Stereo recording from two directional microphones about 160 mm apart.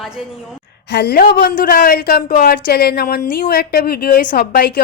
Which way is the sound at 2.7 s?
75° left (ahead or behind).